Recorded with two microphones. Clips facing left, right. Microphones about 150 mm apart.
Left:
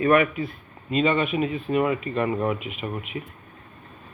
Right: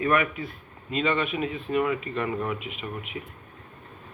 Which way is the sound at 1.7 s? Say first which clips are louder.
Left 2 dB; 20° left (ahead or behind).